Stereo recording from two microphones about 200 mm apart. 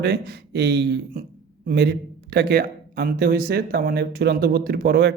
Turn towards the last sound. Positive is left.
turn(degrees=-55)  # may be behind; listen again after turning